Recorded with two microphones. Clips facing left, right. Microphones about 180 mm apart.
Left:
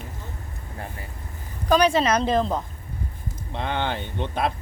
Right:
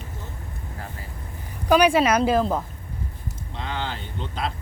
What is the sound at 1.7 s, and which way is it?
Speech, 10° right (ahead or behind).